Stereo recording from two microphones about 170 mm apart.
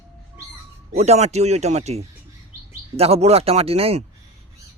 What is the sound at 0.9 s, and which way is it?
Speech, 40° right (ahead or behind).